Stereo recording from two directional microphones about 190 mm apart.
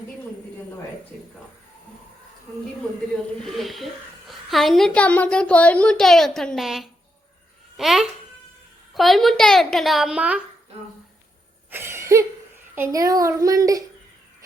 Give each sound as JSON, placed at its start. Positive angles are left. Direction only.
{"t": 3.4, "sound": "a woman's voice", "side_deg": 0}
{"t": 11.7, "sound": "cough", "side_deg": -15}
{"t": 12.7, "sound": "a child's voice", "side_deg": -15}